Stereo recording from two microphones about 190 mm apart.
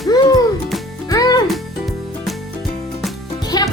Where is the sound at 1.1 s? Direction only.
20° left (ahead or behind).